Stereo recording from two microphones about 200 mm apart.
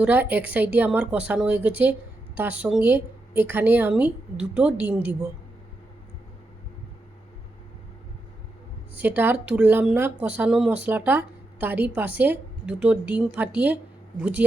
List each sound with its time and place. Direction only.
0.0 s a woman's voice: 10° right (ahead or behind)
9.0 s a woman's voice: 10° right (ahead or behind)